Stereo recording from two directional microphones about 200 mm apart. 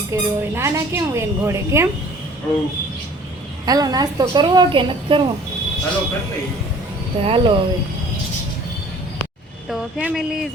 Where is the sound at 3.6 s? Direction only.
20° right (ahead or behind).